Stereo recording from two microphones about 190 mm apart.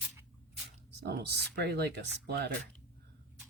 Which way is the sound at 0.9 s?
60° right (ahead or behind).